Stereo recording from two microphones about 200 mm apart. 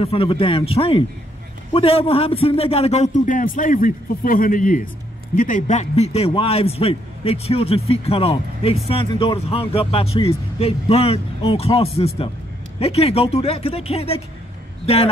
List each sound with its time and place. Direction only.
0.0 s a man's voice: 30° left (ahead or behind)